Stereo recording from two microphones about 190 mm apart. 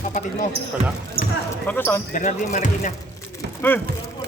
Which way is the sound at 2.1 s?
40° left (ahead or behind).